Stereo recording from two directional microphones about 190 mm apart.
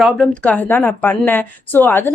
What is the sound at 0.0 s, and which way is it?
A woman's voice, 5° left (ahead or behind).